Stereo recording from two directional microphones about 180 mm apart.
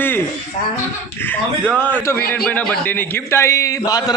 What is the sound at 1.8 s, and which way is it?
A man's voice, 10° left (ahead or behind).